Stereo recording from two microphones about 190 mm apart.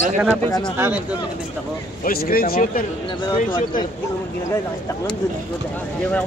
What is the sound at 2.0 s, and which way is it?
Speech, 50° left (ahead or behind).